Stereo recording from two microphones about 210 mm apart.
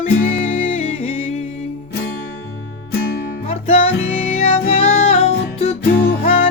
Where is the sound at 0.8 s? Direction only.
30° left (ahead or behind).